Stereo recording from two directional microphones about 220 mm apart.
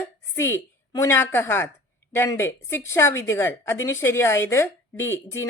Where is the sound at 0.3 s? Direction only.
10° left (ahead or behind).